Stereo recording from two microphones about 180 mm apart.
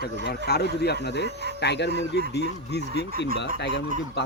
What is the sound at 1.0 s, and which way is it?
Speech, 75° left (ahead or behind).